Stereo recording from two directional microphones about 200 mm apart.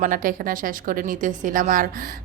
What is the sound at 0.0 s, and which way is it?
A woman's voice, 45° right (ahead or behind).